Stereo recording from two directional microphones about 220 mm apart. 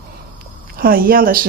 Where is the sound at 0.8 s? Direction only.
40° right (ahead or behind).